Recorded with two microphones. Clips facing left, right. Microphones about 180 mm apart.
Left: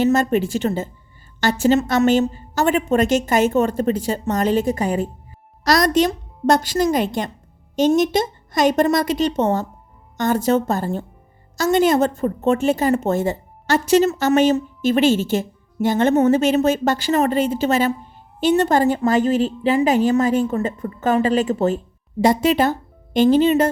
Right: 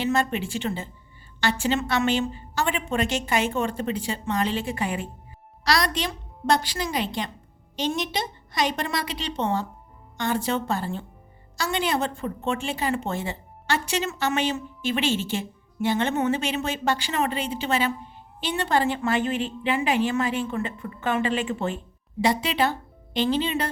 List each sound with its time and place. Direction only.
0.0 s a woman's voice: 40° left (ahead or behind)